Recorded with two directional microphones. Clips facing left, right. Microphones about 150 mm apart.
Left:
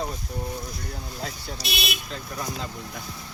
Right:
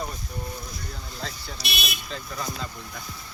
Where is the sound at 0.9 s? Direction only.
20° left (ahead or behind).